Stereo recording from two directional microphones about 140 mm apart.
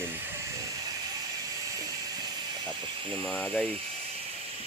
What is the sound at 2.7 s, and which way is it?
Speech, 10° left (ahead or behind).